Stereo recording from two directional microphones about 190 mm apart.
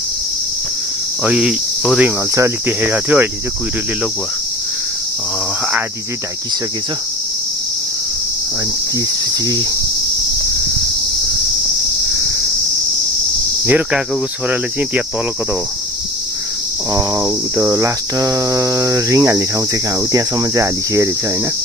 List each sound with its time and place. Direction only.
1.2 s cricket: 5° right (ahead or behind)
13.7 s cricket: 10° right (ahead or behind)
16.9 s cricket: 15° right (ahead or behind)